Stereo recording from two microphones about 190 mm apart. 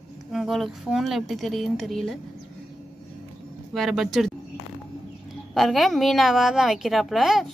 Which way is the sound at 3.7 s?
Centre (ahead or behind).